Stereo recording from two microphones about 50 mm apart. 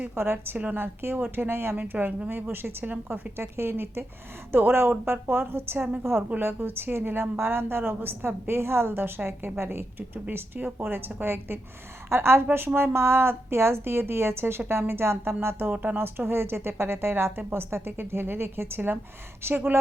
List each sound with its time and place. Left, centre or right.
0.2 s a woman's voice: right
0.5 s a woman's voice: right
1.5 s a woman's voice: right
1.7 s a woman's voice: right
10.2 s a woman's voice: right
12.0 s a woman's voice: right
15.7 s a woman's voice: right
16.0 s a woman's voice: right